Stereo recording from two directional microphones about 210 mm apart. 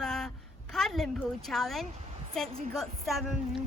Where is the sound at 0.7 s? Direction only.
Centre (ahead or behind).